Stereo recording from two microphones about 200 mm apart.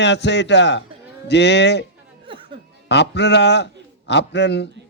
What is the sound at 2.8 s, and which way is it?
A man's voice, 60° left (ahead or behind).